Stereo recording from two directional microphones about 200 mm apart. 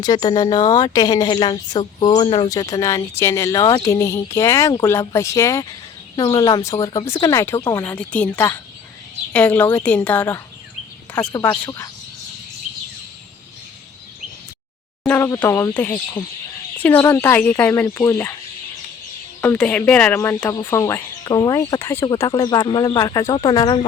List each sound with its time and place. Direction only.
0.0 s a woman's voice: 20° left (ahead or behind)
7.2 s speech: 15° left (ahead or behind)
15.0 s speech: 10° left (ahead or behind)
19.4 s speech: 5° left (ahead or behind)